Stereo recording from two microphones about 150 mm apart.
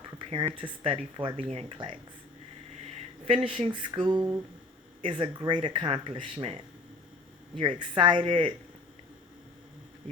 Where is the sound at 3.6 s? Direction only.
30° right (ahead or behind).